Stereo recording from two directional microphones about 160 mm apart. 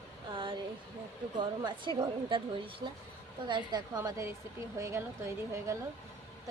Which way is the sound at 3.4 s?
30° right (ahead or behind).